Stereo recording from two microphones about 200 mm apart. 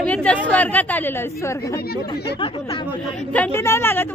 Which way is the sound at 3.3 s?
10° left (ahead or behind).